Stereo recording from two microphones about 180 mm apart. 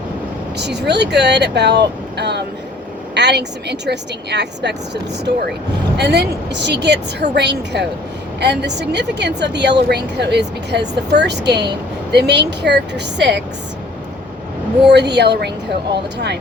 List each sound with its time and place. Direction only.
0.5 s a woman's voice: 70° right (ahead or behind)
14.9 s a woman's voice: 70° right (ahead or behind)